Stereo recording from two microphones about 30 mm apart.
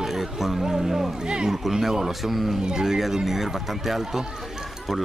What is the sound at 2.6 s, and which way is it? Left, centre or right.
Speech, centre.